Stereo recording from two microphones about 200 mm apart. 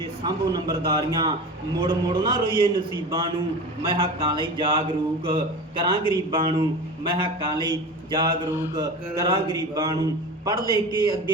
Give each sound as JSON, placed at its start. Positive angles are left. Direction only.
{"t": 0.3, "sound": "speech", "side_deg": -20}
{"t": 3.8, "sound": "speech", "side_deg": -25}
{"t": 10.5, "sound": "a man's voice", "side_deg": 15}